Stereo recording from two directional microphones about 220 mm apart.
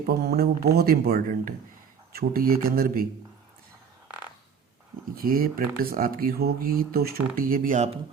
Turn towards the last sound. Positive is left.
turn(degrees=-35)  # may be behind; listen again after turning